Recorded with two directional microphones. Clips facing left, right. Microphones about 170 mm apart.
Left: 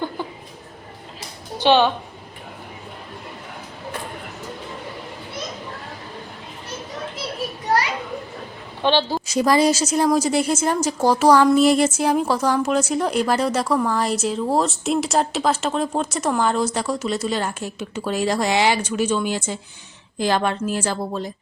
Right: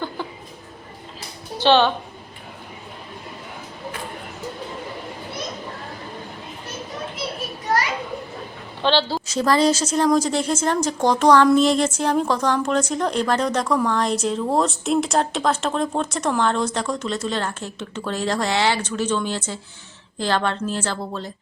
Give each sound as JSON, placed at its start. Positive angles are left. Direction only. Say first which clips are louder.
{"t": 1.5, "sound": "a woman's voice", "louder": "even", "side_deg": 15}
{"t": 8.8, "sound": "a woman's voice", "louder": "left 1 dB", "side_deg": 15}